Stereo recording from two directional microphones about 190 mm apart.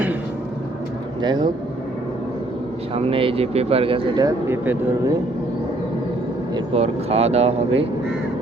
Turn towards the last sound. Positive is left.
turn(degrees=-30)  # may be behind; listen again after turning